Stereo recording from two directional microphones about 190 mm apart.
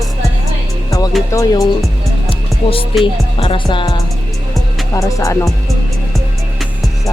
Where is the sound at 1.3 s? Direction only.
15° left (ahead or behind).